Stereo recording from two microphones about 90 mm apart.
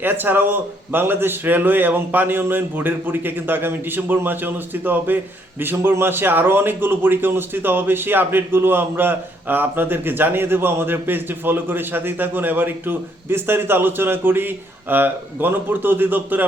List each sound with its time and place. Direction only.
0.0 s a man's voice: 20° right (ahead or behind)